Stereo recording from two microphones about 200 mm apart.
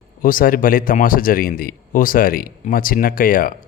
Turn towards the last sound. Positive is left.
turn(degrees=45)  # may be behind; listen again after turning